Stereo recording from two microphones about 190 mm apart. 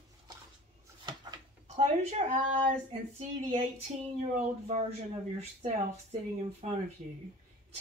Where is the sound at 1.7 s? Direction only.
35° right (ahead or behind).